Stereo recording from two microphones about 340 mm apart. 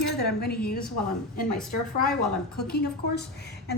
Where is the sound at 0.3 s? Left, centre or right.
Left.